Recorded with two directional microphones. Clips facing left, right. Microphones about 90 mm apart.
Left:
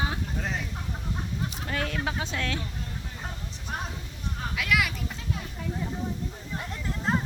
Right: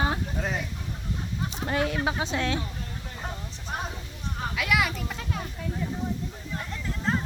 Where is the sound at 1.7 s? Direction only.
15° right (ahead or behind).